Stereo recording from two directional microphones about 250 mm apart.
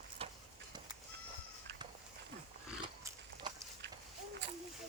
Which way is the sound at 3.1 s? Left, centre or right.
Centre.